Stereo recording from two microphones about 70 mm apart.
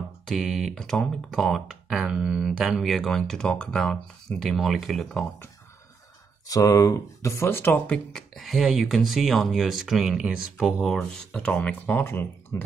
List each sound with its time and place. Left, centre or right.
0.3 s speech: centre
4.4 s speech: centre
6.4 s speech: left
7.9 s speech: centre
8.4 s speech: centre
10.8 s speech: centre
11.3 s speech: centre
11.8 s speech: left